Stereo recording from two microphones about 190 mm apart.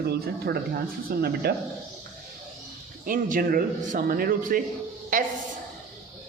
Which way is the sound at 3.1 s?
45° right (ahead or behind).